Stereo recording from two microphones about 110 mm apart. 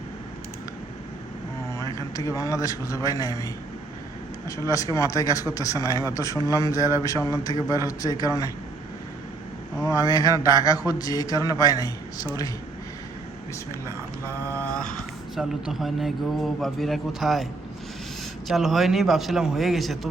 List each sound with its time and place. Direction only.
2.1 s a man's voice: 30° left (ahead or behind)
9.8 s a man's voice: 30° left (ahead or behind)
14.6 s speech: 5° left (ahead or behind)
15.4 s a man's voice: 5° right (ahead or behind)